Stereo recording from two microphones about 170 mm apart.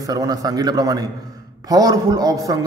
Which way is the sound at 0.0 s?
20° right (ahead or behind).